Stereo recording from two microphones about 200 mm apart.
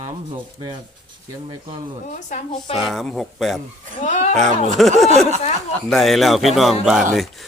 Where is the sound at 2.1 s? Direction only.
40° left (ahead or behind).